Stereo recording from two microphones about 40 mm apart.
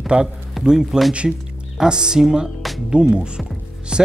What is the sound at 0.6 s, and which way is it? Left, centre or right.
Speech, centre.